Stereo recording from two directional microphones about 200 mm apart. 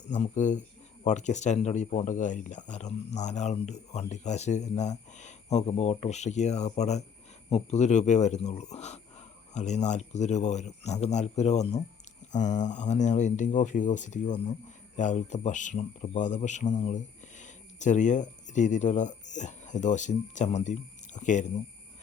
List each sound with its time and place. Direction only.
0.1 s speech: 35° left (ahead or behind)